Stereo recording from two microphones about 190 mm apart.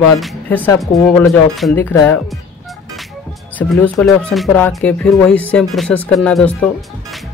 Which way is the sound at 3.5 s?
10° left (ahead or behind).